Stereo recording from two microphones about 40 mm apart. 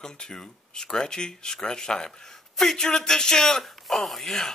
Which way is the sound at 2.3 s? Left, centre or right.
Centre.